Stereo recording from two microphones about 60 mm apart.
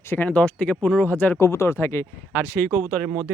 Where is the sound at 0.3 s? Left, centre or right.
Left.